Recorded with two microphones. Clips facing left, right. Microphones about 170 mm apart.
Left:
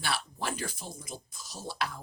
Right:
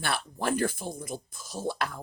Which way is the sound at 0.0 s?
55° right (ahead or behind).